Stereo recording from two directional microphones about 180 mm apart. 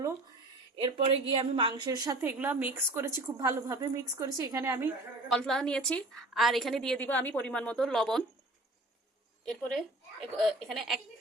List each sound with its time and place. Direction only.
0.8 s a woman's voice: 30° right (ahead or behind); by 4.9 s 15° right (ahead or behind)
5.3 s a woman's voice: 5° left (ahead or behind)
9.5 s a woman's voice: centre (ahead or behind)